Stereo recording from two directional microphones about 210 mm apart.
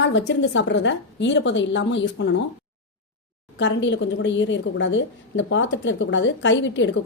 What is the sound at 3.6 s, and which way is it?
A woman's voice, 60° left (ahead or behind).